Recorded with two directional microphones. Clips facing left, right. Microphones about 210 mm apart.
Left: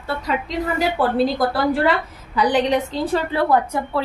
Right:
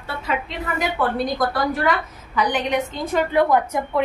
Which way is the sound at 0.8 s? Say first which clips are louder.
Left 3 dB; 30° left (ahead or behind).